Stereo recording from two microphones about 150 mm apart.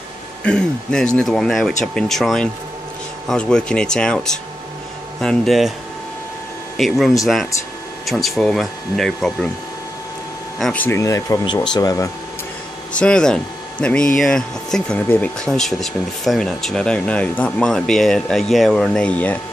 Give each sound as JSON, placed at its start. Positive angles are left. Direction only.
{"t": 0.4, "sound": "speech", "side_deg": 5}
{"t": 5.2, "sound": "speech", "side_deg": 5}
{"t": 6.8, "sound": "speech", "side_deg": 0}
{"t": 10.6, "sound": "speech", "side_deg": 10}
{"t": 13.0, "sound": "speech", "side_deg": 5}